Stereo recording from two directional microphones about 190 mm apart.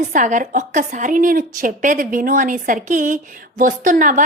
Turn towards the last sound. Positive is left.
turn(degrees=-40)  # may be behind; listen again after turning